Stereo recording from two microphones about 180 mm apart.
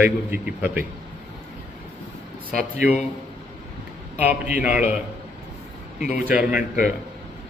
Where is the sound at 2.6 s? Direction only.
10° right (ahead or behind).